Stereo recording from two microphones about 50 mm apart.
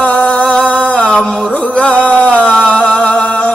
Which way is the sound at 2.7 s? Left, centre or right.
Left.